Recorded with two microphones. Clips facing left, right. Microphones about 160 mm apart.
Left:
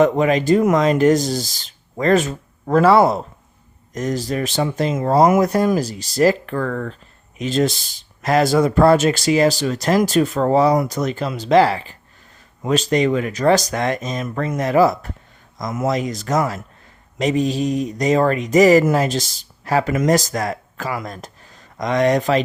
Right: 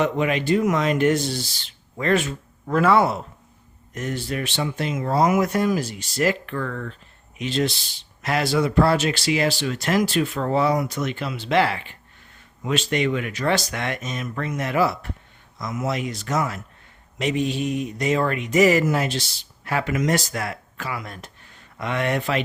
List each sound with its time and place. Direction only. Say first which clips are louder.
0.0 s speech: left 6 dB; 40° left (ahead or behind)